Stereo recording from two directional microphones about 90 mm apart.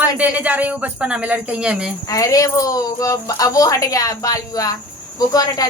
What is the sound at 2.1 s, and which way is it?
Speech, 40° left (ahead or behind).